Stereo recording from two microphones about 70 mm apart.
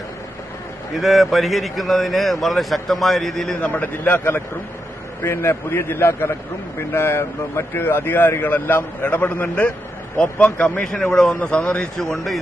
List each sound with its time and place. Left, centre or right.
0.9 s speech: centre
3.7 s speech: left
10.9 s speech: centre
11.9 s speech: centre